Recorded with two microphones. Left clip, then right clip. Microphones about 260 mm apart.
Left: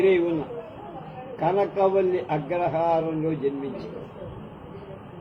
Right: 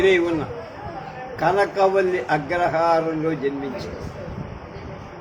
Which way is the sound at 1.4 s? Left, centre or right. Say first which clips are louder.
Right 4 dB; right.